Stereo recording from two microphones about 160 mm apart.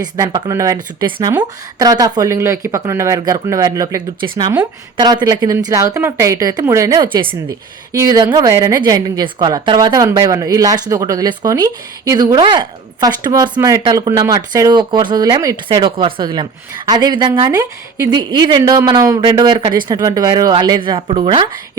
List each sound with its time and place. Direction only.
0.0 s speech: 25° right (ahead or behind)